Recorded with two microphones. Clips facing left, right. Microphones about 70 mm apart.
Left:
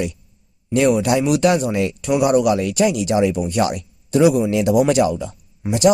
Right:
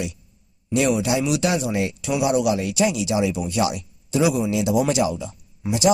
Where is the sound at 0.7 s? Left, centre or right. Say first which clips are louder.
Left 4 dB; left.